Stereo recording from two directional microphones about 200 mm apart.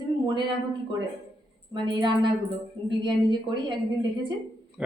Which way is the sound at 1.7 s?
25° right (ahead or behind).